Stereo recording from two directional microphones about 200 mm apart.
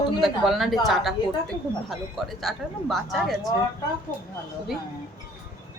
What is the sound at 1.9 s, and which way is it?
Speech, centre (ahead or behind).